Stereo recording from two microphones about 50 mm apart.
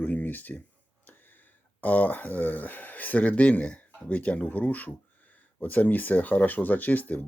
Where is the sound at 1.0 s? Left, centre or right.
Left.